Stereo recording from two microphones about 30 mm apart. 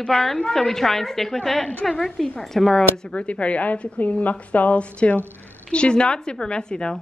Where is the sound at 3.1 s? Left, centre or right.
Left.